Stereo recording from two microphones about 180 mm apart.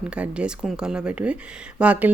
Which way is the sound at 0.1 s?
5° right (ahead or behind).